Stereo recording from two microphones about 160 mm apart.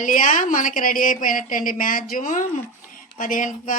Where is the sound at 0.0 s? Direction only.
55° left (ahead or behind).